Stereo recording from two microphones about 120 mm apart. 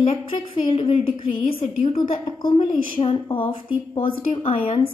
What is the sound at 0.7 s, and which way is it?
A woman's voice, 50° left (ahead or behind).